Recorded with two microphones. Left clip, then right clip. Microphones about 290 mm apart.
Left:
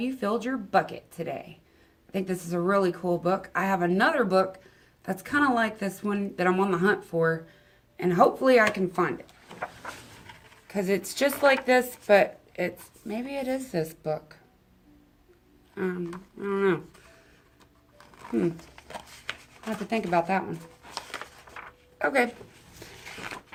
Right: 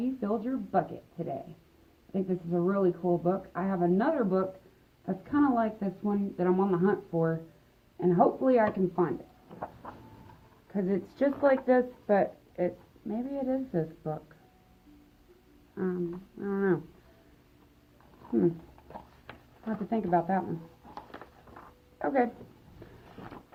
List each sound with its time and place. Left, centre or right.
0.0 s a woman's voice: left
2.2 s a woman's voice: left
10.7 s speech: left
15.7 s speech: left
18.9 s a sound: left
21.9 s speech: left